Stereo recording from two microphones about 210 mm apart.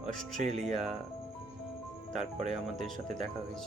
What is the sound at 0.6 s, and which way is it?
Speech, centre (ahead or behind).